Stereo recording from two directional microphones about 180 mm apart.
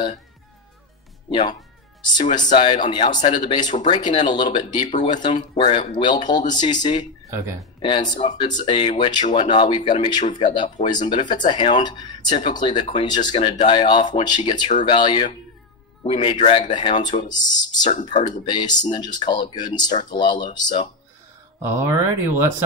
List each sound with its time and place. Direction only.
1.3 s speech: 30° left (ahead or behind)
7.2 s speech: 15° right (ahead or behind)
7.8 s speech: 25° left (ahead or behind)
17.6 s speech: 25° left (ahead or behind)
17.9 s speech: 40° left (ahead or behind)
18.4 s speech: 25° left (ahead or behind)
21.6 s speech: 15° right (ahead or behind)